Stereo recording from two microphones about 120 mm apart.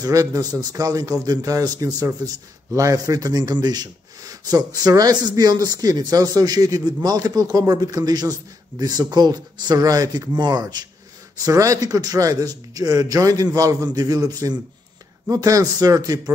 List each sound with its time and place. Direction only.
0.0 s a man's voice: 30° right (ahead or behind)